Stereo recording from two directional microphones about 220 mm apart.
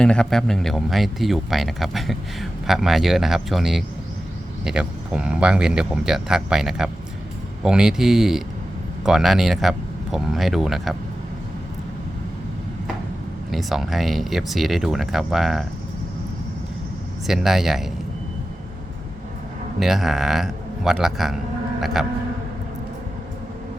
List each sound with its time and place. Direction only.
0.0 s speech: 5° left (ahead or behind)
13.5 s speech: centre (ahead or behind)
17.2 s speech: centre (ahead or behind)
19.8 s speech: centre (ahead or behind)